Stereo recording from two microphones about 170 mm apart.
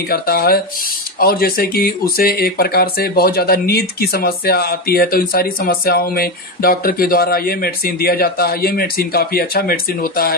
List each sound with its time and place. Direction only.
0.1 s speech: 65° left (ahead or behind)